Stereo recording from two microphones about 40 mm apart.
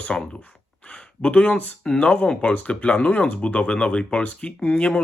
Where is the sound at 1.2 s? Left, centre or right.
Left.